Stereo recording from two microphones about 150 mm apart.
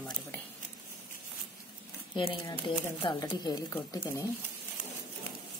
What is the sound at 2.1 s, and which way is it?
Speech, 35° left (ahead or behind).